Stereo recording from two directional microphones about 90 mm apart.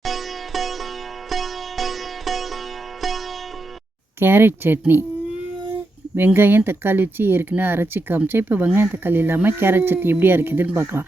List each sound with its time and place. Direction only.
0.0 s sitar: centre (ahead or behind)
4.2 s speech: 25° right (ahead or behind)
6.1 s speech: 25° right (ahead or behind)